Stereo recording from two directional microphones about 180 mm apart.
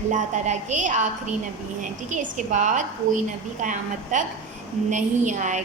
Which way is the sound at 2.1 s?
45° right (ahead or behind).